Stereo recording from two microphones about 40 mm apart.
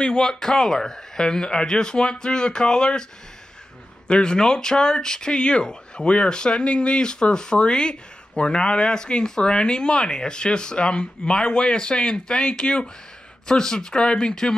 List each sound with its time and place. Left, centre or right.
0.2 s speech: centre
4.1 s speech: left